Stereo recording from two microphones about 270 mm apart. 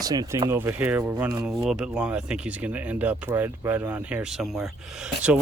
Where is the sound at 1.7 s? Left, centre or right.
Centre.